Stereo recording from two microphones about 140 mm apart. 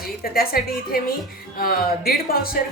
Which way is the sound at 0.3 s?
90° left.